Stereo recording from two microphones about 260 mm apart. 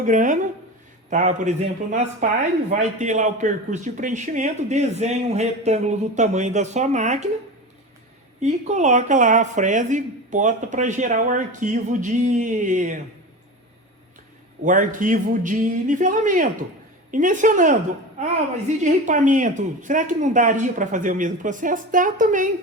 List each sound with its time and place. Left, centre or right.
0.0 s speech: right
8.4 s speech: right
14.6 s speech: right
18.8 s speech: right